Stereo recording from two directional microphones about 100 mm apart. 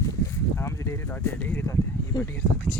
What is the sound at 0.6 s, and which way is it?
Speech, 25° left (ahead or behind).